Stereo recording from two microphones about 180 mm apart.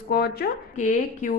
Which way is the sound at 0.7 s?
45° left (ahead or behind).